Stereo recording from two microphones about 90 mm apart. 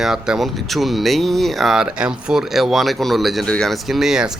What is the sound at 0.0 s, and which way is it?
Speech, 5° right (ahead or behind).